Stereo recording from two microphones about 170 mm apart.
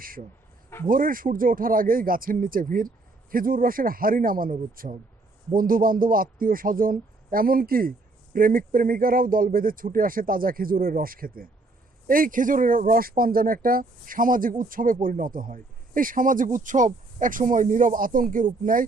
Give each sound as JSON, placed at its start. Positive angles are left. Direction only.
{"t": 0.9, "sound": "a man's voice", "side_deg": -55}